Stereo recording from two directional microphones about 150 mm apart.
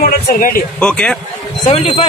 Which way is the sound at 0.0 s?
70° left (ahead or behind).